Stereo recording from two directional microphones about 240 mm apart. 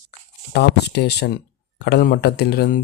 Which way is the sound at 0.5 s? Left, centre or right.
Left.